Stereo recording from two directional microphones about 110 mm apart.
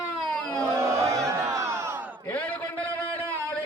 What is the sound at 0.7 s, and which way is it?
Battle cry, 25° right (ahead or behind).